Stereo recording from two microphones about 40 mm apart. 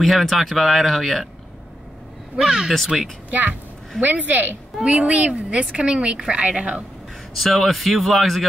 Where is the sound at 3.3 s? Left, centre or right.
Right.